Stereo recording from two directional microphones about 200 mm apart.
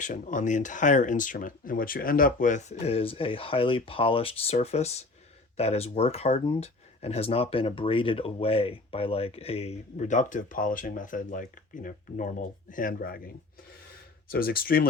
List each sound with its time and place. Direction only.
0.0 s speech: 40° left (ahead or behind)